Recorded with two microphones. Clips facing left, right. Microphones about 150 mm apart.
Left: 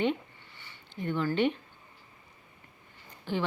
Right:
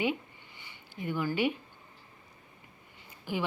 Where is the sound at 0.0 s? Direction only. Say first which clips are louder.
Left 2 dB; 10° right (ahead or behind).